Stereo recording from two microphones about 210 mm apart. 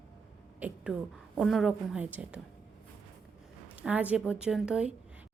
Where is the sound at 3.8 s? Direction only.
5° right (ahead or behind).